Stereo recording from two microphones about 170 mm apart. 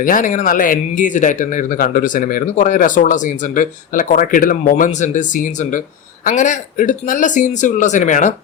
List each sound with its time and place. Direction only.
0.0 s speech: 50° left (ahead or behind)